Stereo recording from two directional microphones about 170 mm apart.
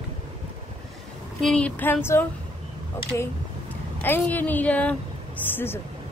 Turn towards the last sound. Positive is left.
turn(degrees=15)  # may be behind; listen again after turning